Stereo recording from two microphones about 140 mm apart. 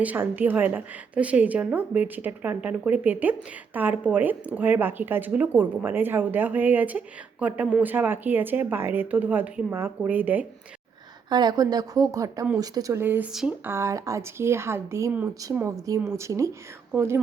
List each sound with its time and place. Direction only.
0.0 s speech: 10° right (ahead or behind)
11.3 s speech: 30° right (ahead or behind); by 13.6 s 5° right (ahead or behind)
13.7 s speech: 20° right (ahead or behind)